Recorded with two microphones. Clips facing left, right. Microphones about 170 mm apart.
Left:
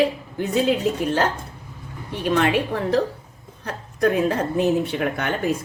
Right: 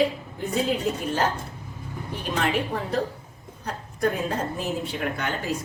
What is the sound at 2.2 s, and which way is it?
A woman's voice, 70° left (ahead or behind).